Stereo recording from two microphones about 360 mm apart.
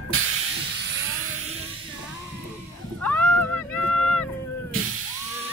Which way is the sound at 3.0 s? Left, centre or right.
Centre.